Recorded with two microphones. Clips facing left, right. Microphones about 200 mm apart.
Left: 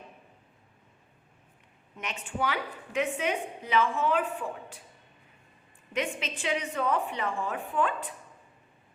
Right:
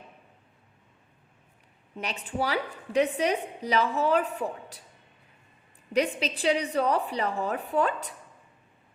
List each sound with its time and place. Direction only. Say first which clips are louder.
2.0 s a woman's voice: right 3 dB; 35° right (ahead or behind)
5.9 s a woman's voice: right 6 dB; 35° right (ahead or behind)